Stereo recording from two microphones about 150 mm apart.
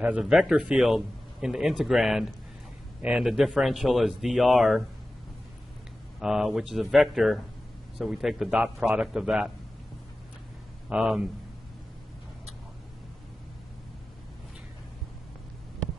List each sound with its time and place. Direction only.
0.0 s speech: 5° right (ahead or behind)
6.2 s speech: 5° right (ahead or behind)
10.9 s speech: 5° right (ahead or behind)